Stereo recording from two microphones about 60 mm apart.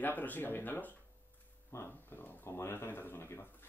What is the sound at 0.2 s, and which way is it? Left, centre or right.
Speech, left.